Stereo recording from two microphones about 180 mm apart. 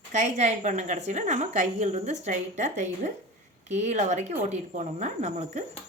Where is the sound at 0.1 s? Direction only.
40° right (ahead or behind).